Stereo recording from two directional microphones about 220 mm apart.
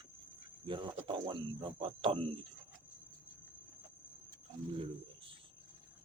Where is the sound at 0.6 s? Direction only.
25° right (ahead or behind).